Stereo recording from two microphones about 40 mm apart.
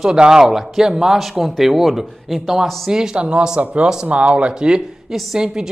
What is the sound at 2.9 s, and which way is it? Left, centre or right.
Speech, centre.